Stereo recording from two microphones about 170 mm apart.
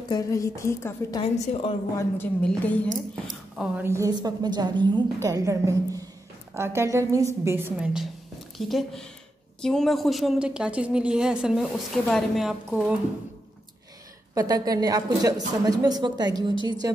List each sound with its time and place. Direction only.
0.1 s a woman's voice: 20° left (ahead or behind)
1.4 s a woman's voice: 35° left (ahead or behind)
2.4 s a woman's voice: 5° left (ahead or behind)
3.5 s a woman's voice: 5° right (ahead or behind)
14.3 s a woman's voice: 20° right (ahead or behind)